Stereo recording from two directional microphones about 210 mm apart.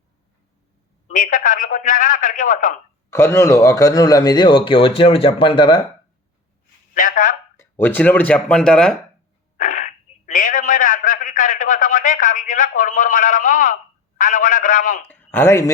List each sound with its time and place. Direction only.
1.0 s a man's voice: 40° left (ahead or behind)
3.1 s a man's voice: 10° left (ahead or behind)
6.9 s speech: 40° left (ahead or behind)
7.5 s speech: 10° left (ahead or behind)
9.6 s a sound: 40° left (ahead or behind)
14.2 s a man's voice: 40° left (ahead or behind)
15.0 s speech: 10° left (ahead or behind)